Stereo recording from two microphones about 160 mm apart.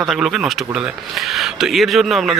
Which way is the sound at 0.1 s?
Centre (ahead or behind).